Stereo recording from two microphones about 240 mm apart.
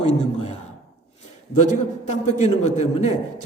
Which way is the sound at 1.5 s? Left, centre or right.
Left.